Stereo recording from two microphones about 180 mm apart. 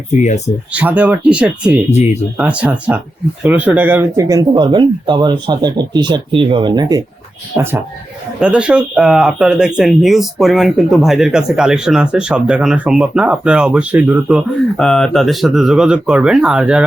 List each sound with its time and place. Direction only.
0.1 s speech: 40° left (ahead or behind)
0.7 s speech: 10° right (ahead or behind)
14.8 s speech: 5° left (ahead or behind)